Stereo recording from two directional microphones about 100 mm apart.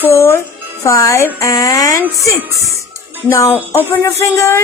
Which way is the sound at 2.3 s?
30° right (ahead or behind).